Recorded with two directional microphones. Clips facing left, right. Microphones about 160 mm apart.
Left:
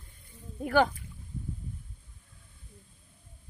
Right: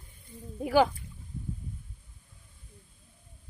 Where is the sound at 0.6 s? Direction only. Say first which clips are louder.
Right 1 dB; 10° right (ahead or behind).